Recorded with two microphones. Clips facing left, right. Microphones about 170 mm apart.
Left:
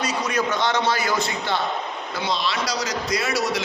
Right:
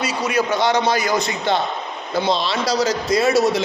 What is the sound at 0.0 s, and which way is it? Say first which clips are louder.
A man's voice: right 3 dB; 10° right (ahead or behind).